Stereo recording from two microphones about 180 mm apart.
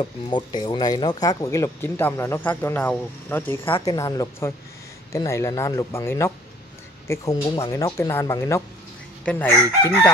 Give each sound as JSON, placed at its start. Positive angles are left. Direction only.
{"t": 0.0, "sound": "speech", "side_deg": 25}
{"t": 3.7, "sound": "speech", "side_deg": 20}